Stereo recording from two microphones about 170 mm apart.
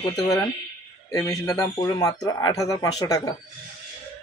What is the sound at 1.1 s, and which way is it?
Speech, 20° left (ahead or behind).